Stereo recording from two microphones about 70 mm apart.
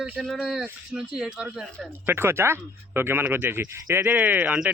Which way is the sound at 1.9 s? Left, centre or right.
Right.